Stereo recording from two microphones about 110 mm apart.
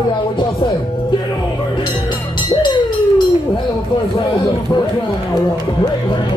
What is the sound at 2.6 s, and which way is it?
Music, 45° left (ahead or behind).